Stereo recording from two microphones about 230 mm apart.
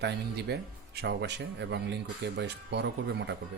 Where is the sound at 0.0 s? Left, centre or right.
Right.